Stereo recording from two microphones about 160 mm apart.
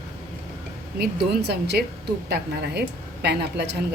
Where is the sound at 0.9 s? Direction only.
85° right.